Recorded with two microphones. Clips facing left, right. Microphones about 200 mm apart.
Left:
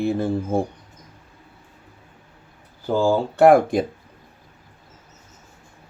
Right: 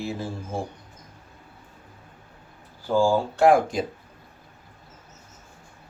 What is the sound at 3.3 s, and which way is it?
Speech, 60° left (ahead or behind).